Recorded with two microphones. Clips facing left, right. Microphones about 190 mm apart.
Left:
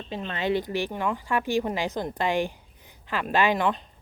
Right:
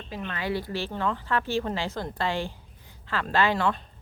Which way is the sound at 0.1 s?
25° left (ahead or behind).